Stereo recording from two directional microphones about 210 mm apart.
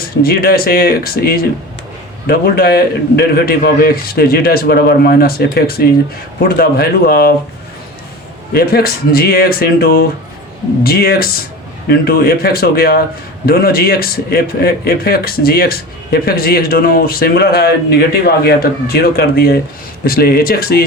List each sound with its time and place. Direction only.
0.2 s speech: 45° left (ahead or behind)
8.5 s speech: 45° left (ahead or behind)